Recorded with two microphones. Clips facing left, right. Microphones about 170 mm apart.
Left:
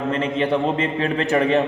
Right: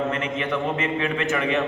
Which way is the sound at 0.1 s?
30° left (ahead or behind).